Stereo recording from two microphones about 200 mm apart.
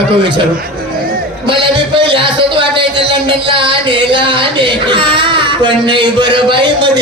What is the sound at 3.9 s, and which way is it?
Speech, 25° right (ahead or behind).